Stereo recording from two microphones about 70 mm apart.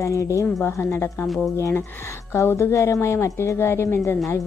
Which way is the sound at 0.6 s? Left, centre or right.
Left.